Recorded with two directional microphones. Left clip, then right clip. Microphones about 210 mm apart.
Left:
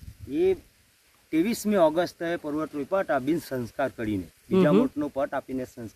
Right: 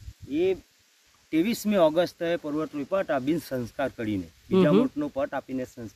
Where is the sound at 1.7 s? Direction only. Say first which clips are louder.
Left 1 dB; 50° right (ahead or behind).